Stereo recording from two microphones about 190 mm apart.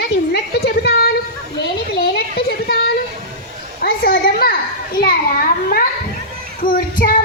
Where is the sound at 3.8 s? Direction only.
55° left (ahead or behind).